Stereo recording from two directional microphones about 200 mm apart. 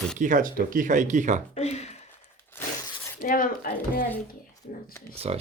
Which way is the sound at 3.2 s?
45° left (ahead or behind).